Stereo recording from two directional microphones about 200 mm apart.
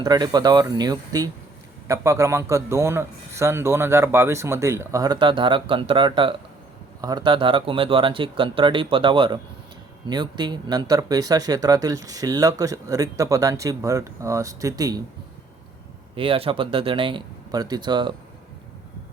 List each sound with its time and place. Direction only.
0.0 s speech: 20° right (ahead or behind)
16.1 s speech: 25° right (ahead or behind)